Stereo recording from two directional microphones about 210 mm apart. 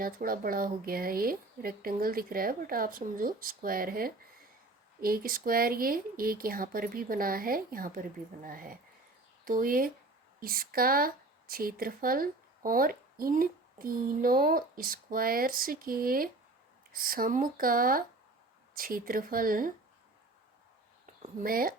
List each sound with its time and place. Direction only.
0.0 s speech: 45° right (ahead or behind)
21.2 s speech: 45° right (ahead or behind)